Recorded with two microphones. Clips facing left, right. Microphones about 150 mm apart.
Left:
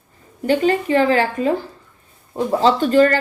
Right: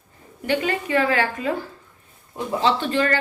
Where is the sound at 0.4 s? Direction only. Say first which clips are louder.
Left 7 dB; 35° left (ahead or behind).